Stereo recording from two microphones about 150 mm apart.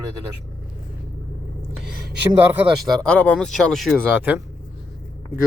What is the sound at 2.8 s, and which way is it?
Speech, 5° left (ahead or behind).